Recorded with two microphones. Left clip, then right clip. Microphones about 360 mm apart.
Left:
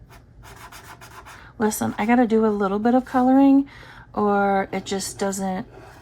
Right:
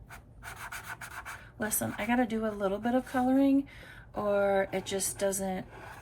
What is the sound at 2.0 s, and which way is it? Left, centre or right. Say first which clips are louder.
Speech: left 12 dB; centre.